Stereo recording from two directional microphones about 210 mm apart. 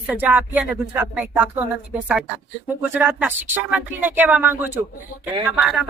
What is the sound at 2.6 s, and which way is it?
Speech, 5° right (ahead or behind).